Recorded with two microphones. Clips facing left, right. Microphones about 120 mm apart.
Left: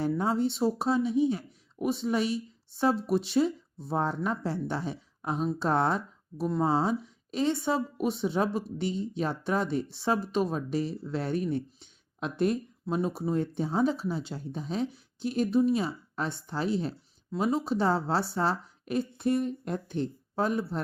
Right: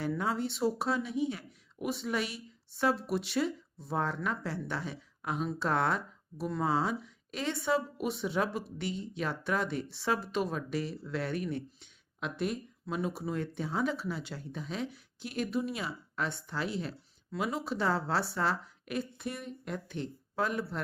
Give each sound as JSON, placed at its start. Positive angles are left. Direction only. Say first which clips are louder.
{"t": 0.0, "sound": "speech", "louder": "left 5 dB", "side_deg": 30}